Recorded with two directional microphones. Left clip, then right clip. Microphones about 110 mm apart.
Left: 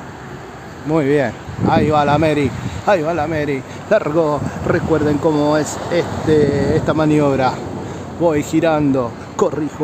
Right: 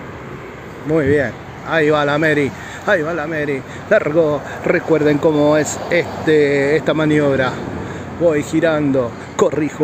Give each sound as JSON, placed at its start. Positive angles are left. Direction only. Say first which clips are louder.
{"t": 0.9, "sound": "speech", "louder": "even", "side_deg": 45}
{"t": 3.0, "sound": "speech", "louder": "left 1 dB", "side_deg": 45}
{"t": 3.9, "sound": "speech", "louder": "right 1 dB", "side_deg": 35}
{"t": 4.6, "sound": "speech", "louder": "right 2 dB", "side_deg": 15}
{"t": 5.9, "sound": "speech", "louder": "even", "side_deg": 5}
{"t": 6.9, "sound": "speech", "louder": "even", "side_deg": 30}